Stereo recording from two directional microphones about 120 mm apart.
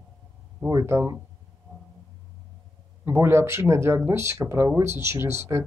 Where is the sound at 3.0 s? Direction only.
20° right (ahead or behind).